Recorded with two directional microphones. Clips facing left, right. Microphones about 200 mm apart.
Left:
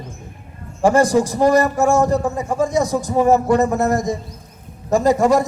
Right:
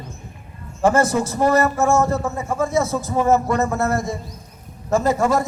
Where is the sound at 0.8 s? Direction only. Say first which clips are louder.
Left 3 dB; 15° left (ahead or behind).